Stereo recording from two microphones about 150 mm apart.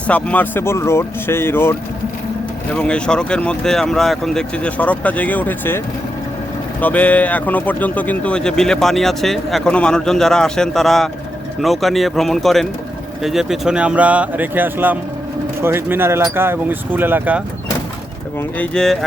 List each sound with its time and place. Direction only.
0.1 s speech: 10° left (ahead or behind)
2.7 s speech: 5° left (ahead or behind); by 17.4 s 10° right (ahead or behind)
18.3 s speech: 10° left (ahead or behind)